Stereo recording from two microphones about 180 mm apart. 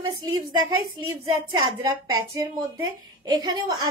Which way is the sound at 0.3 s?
20° right (ahead or behind).